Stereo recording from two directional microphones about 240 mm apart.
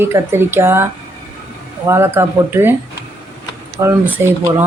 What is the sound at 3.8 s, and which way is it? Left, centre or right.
Speech, centre.